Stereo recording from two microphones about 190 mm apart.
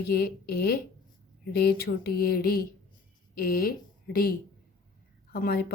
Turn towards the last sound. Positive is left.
turn(degrees=50)  # may be behind; listen again after turning